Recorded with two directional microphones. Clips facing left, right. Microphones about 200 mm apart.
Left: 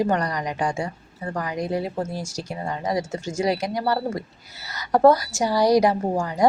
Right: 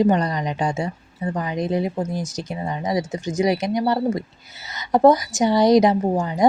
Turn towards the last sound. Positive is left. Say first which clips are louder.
# right 2 dB
turn(degrees=-20)  # may be behind; listen again after turning